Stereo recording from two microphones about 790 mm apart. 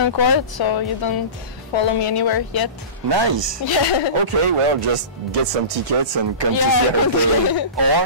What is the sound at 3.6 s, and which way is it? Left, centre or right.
Speech, left.